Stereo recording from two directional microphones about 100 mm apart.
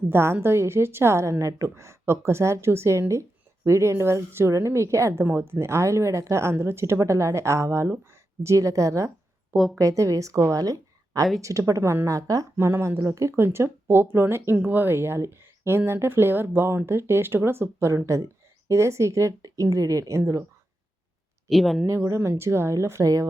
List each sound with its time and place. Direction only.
0.1 s a woman's voice: 25° right (ahead or behind)
21.5 s speech: centre (ahead or behind)
21.8 s a woman's voice: 30° right (ahead or behind)